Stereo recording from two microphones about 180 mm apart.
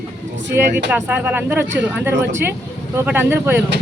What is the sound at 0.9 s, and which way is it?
A woman's voice, 10° right (ahead or behind).